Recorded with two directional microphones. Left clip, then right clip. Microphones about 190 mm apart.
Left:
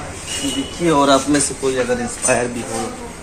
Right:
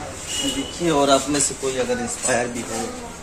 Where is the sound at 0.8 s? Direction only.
15° left (ahead or behind).